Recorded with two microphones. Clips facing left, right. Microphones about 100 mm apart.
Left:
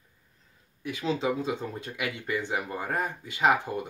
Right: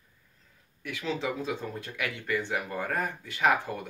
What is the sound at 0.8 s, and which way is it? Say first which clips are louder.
Speech: left 3 dB; 20° left (ahead or behind).